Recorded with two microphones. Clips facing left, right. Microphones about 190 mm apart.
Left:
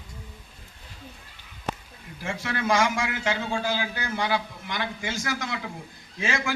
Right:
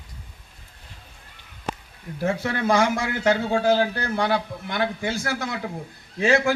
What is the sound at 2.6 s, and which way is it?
Speech, 60° right (ahead or behind).